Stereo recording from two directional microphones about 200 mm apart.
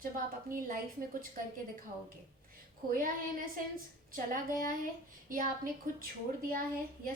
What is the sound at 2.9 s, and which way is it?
A woman's voice, 45° right (ahead or behind).